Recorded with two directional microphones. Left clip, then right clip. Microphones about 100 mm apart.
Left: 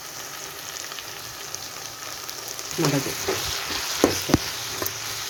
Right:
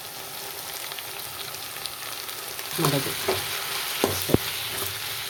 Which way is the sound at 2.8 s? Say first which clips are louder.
Left 1 dB; 20° left (ahead or behind).